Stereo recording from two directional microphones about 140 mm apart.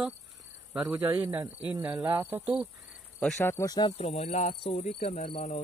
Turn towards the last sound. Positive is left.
turn(degrees=60)  # may be behind; listen again after turning